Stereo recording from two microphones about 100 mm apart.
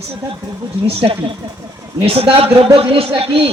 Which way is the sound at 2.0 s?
70° right (ahead or behind).